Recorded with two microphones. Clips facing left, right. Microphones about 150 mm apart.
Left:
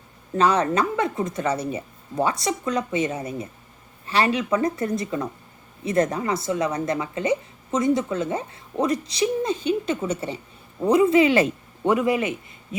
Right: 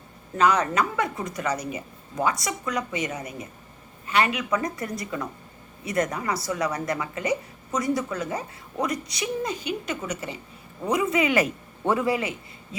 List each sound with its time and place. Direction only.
0.3 s a woman's voice: 30° left (ahead or behind)